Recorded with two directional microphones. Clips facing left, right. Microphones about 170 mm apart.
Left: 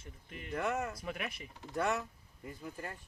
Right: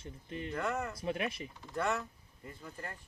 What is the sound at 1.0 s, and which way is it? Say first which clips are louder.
Speech: right 5 dB; 25° right (ahead or behind).